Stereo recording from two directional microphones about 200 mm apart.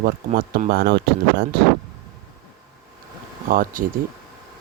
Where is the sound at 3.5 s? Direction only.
45° right (ahead or behind).